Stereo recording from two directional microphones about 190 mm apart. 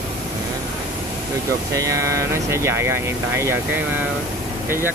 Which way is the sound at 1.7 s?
15° right (ahead or behind).